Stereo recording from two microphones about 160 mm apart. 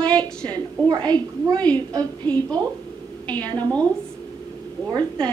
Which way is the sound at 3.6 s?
10° left (ahead or behind).